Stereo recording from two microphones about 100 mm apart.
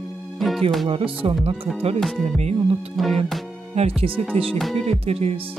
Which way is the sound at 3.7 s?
75° right (ahead or behind).